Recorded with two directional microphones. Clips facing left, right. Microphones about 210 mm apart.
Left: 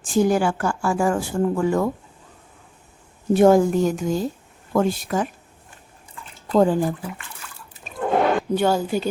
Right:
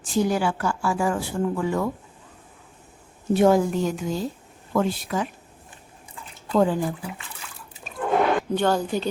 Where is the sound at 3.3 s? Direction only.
45° left (ahead or behind).